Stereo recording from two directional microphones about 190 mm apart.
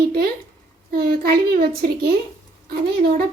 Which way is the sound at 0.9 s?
50° right (ahead or behind).